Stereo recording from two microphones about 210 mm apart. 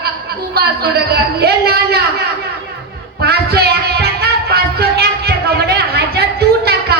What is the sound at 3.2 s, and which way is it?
Music, 50° right (ahead or behind).